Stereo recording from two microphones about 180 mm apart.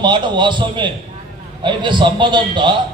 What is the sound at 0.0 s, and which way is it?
A man's voice, 25° right (ahead or behind).